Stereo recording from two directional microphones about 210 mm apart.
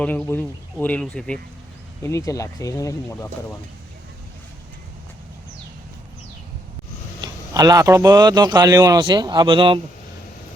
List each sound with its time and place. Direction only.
0.0 s speech: 5° left (ahead or behind)
7.2 s a man's voice: 15° right (ahead or behind)